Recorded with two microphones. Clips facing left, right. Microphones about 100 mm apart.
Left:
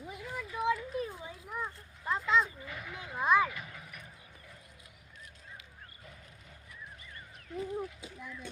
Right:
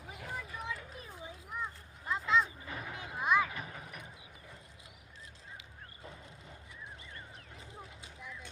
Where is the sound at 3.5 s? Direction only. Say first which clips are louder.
Right 2 dB; 35° right (ahead or behind).